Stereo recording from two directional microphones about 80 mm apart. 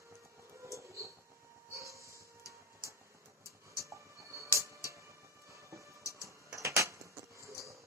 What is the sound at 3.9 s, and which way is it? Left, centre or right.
Music, right.